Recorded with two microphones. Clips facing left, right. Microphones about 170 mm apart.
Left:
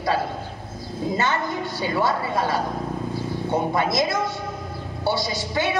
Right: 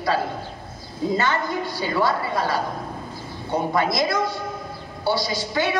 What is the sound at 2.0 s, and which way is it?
Speech, 20° left (ahead or behind).